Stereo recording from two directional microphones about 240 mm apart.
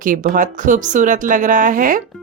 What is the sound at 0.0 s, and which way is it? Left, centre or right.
Speech, right.